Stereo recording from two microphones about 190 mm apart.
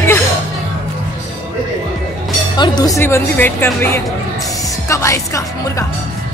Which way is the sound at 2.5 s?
20° left (ahead or behind).